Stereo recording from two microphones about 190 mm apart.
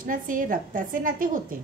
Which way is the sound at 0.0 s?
45° right (ahead or behind).